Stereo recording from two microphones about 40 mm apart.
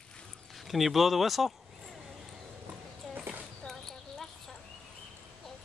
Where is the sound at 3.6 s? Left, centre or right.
Centre.